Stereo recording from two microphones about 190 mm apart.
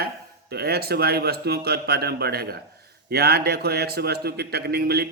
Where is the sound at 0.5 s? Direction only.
55° right (ahead or behind).